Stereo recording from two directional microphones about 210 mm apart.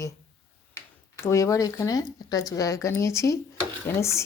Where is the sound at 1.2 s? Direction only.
15° left (ahead or behind).